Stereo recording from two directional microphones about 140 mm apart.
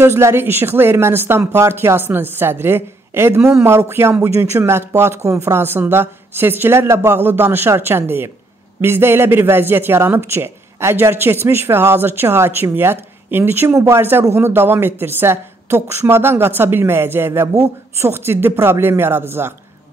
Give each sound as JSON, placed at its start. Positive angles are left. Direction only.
{"t": 0.0, "sound": "speech", "side_deg": -20}